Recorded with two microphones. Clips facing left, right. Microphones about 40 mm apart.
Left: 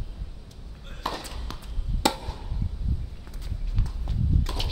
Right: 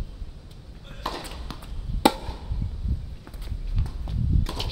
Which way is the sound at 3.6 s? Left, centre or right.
Centre.